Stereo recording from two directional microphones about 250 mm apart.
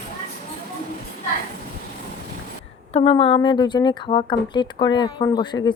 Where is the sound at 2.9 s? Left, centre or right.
Left.